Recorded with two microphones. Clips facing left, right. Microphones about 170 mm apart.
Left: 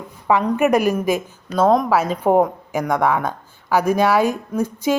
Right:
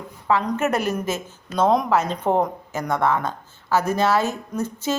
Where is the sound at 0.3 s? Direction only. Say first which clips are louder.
Left 5 dB; 15° left (ahead or behind).